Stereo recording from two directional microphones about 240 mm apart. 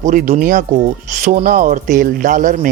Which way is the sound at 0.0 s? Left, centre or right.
Right.